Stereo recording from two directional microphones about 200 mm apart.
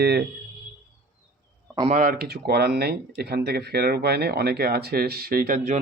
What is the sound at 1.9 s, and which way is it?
Speech, 45° right (ahead or behind).